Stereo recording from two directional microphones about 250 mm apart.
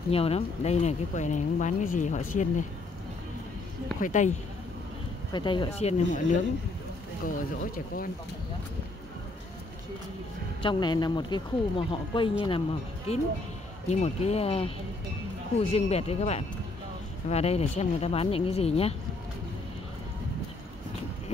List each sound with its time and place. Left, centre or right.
0.1 s speech: left
4.0 s speech: left
5.3 s speech: centre; by 8.1 s left
10.6 s speech: centre
15.7 s speech: left